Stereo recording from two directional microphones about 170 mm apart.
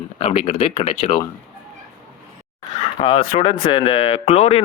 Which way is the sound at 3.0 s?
35° left (ahead or behind).